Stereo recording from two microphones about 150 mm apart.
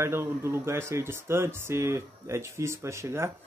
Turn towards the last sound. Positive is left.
turn(degrees=-20)  # may be behind; listen again after turning